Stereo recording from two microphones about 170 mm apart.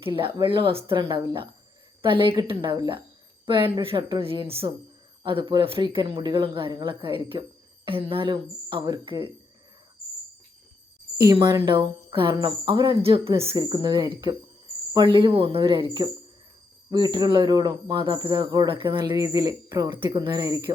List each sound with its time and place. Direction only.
0.0 s a woman's voice: 30° right (ahead or behind)
11.3 s a woman's voice: 25° right (ahead or behind)